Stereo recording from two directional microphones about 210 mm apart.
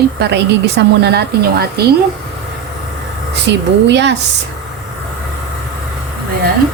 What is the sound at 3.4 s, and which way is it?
Speech, 55° right (ahead or behind).